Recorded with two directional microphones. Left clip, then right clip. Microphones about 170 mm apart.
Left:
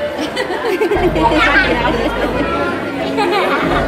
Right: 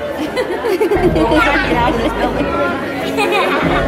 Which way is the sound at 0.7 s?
15° right (ahead or behind).